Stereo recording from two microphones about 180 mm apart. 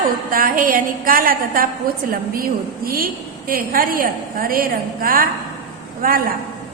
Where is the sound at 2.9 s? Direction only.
55° right (ahead or behind).